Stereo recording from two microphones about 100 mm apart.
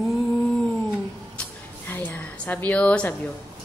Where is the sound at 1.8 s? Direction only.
20° left (ahead or behind).